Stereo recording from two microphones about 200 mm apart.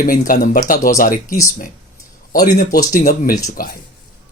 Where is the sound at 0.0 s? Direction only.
45° left (ahead or behind).